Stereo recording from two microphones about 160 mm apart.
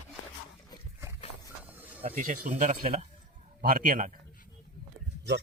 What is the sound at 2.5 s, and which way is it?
Speech, 50° right (ahead or behind).